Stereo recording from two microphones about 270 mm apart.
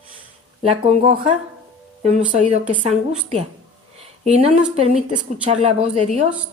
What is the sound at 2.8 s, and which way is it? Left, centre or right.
Speech, right.